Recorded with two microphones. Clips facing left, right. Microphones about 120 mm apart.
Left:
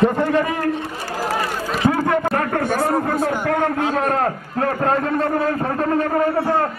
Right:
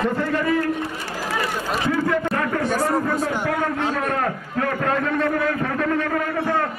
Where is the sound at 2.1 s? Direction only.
50° left (ahead or behind).